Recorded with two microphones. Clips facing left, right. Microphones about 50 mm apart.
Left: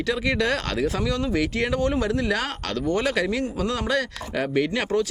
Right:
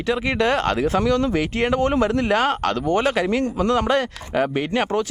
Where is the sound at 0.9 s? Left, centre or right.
Right.